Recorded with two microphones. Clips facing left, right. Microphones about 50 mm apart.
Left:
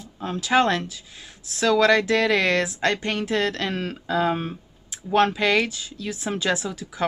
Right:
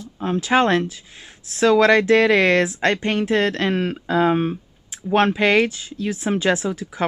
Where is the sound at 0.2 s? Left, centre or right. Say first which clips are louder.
Right 3 dB; right.